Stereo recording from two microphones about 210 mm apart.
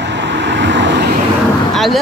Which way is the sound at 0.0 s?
60° right (ahead or behind).